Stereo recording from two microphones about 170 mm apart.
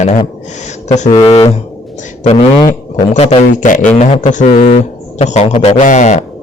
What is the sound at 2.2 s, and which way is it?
Speech, 35° left (ahead or behind).